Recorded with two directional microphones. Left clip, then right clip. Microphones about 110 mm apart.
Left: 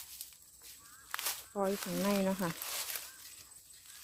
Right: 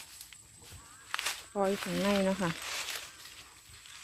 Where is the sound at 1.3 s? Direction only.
Centre (ahead or behind).